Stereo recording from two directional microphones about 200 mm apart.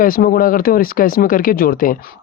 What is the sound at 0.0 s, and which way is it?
Speech, 45° left (ahead or behind).